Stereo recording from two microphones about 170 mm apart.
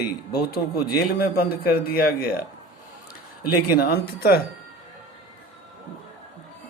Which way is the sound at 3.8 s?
65° left (ahead or behind).